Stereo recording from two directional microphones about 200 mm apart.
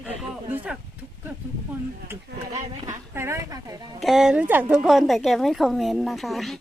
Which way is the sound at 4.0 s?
Centre (ahead or behind).